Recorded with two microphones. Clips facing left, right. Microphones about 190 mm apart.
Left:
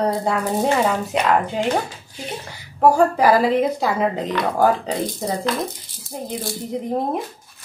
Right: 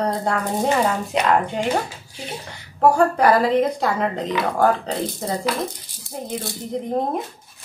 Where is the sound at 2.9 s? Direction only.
5° left (ahead or behind).